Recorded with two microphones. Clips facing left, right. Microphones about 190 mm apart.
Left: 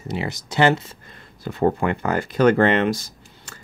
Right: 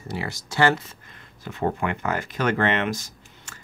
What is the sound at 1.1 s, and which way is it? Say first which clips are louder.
Speech: left 6 dB; 35° left (ahead or behind).